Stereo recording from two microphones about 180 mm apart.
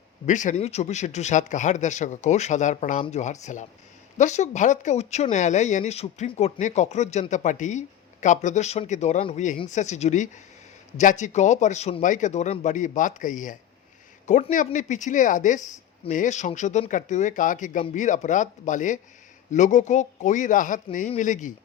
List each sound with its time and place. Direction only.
0.3 s speech: 45° left (ahead or behind)